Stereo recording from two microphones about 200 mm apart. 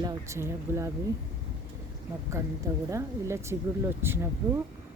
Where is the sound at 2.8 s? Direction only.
15° right (ahead or behind).